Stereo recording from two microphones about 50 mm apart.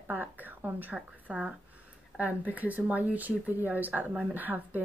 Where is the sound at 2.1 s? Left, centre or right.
Right.